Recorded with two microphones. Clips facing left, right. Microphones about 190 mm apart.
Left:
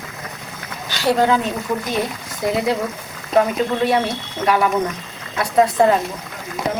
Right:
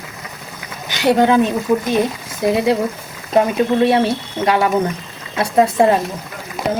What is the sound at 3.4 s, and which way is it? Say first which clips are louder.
Speech: right 3 dB; 25° right (ahead or behind).